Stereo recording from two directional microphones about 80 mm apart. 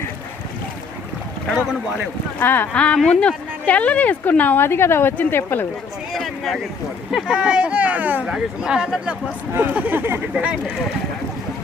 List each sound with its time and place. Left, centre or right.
2.4 s speech: left
2.7 s speech: centre
6.1 s a sound: centre
7.1 s speech: centre
9.6 s speech: right
10.3 s speech: centre